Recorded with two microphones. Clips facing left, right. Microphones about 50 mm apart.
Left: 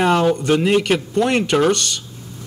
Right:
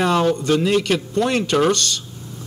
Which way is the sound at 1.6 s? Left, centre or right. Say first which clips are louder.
Right 1 dB; centre.